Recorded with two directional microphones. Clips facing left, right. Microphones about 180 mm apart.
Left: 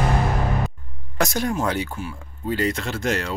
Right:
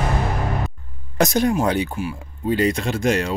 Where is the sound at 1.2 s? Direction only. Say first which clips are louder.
Right 5 dB; 20° right (ahead or behind).